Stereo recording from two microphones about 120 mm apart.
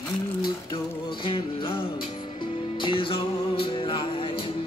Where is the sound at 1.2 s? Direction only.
45° left (ahead or behind).